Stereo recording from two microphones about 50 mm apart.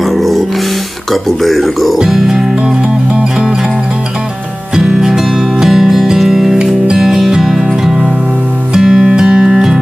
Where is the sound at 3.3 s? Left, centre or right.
Centre.